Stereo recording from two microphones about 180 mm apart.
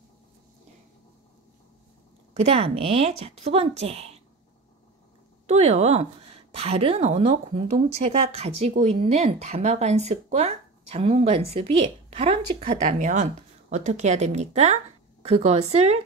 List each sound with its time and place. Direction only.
2.3 s a woman's voice: 35° right (ahead or behind)
5.5 s a woman's voice: 40° right (ahead or behind)